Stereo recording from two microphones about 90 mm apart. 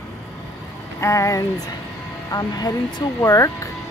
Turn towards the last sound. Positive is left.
turn(degrees=35)  # may be behind; listen again after turning